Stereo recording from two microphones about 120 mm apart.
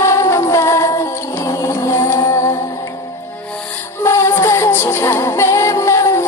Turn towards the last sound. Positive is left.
turn(degrees=25)  # may be behind; listen again after turning